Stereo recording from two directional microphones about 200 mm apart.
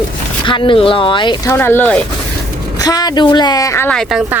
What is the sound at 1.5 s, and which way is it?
Speech, 10° left (ahead or behind).